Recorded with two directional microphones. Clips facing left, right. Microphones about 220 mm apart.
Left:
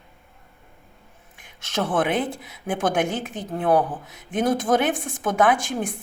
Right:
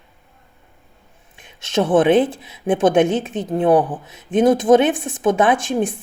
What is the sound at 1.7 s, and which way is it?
Speech, 25° right (ahead or behind).